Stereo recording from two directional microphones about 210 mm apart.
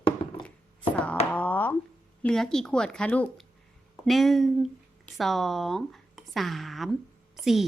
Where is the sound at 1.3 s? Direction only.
10° left (ahead or behind).